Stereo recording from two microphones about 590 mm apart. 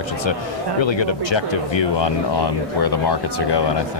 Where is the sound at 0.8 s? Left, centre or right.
Left.